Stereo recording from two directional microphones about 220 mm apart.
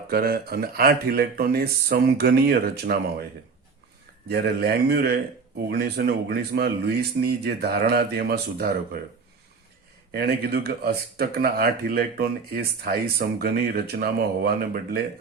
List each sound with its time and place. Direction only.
0.1 s speech: 45° right (ahead or behind)
4.3 s speech: 45° right (ahead or behind)
10.1 s speech: 45° right (ahead or behind)